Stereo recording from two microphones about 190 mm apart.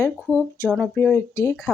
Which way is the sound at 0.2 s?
10° right (ahead or behind).